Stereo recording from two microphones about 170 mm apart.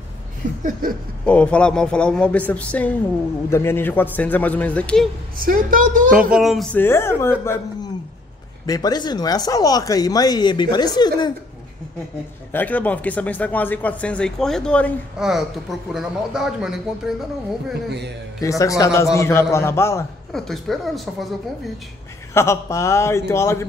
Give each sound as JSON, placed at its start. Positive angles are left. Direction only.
{"t": 0.4, "sound": "a sound", "side_deg": -50}
{"t": 0.8, "sound": "a woman's voice", "side_deg": -55}
{"t": 1.2, "sound": "speech", "side_deg": 5}
{"t": 5.4, "sound": "a woman's voice", "side_deg": -55}
{"t": 6.3, "sound": "speech", "side_deg": 0}
{"t": 8.6, "sound": "speech", "side_deg": 20}
{"t": 12.5, "sound": "speech", "side_deg": 10}
{"t": 18.4, "sound": "speech", "side_deg": 20}
{"t": 20.3, "sound": "speech", "side_deg": 0}
{"t": 22.3, "sound": "speech", "side_deg": 15}